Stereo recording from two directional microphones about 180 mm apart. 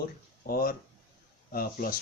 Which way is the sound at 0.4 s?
55° left (ahead or behind).